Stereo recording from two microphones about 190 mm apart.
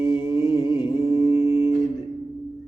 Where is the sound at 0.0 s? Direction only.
20° left (ahead or behind).